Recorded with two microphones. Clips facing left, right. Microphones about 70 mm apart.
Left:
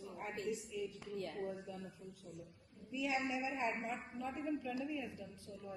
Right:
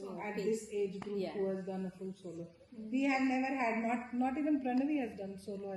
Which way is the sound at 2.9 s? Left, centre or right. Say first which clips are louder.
Right 7 dB; right.